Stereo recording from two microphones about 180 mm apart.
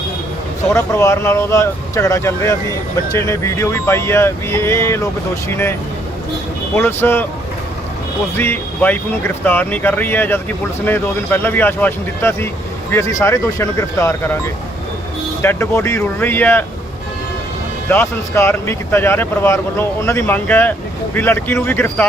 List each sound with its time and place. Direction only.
0.7 s speech: 15° left (ahead or behind)
6.7 s speech: 15° left (ahead or behind)
8.4 s speech: 10° left (ahead or behind)
17.8 s speech: 15° left (ahead or behind)